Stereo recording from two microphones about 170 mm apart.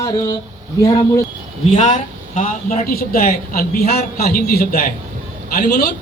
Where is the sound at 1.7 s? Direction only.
45° left (ahead or behind).